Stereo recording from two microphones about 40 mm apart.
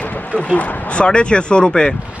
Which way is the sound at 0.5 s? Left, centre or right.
Left.